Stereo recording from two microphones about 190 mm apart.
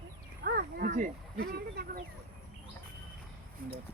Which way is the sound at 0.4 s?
50° right (ahead or behind).